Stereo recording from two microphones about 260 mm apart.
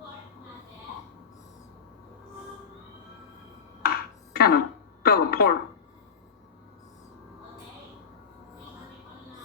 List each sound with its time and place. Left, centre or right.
3.8 s music: left
5.0 s speech: left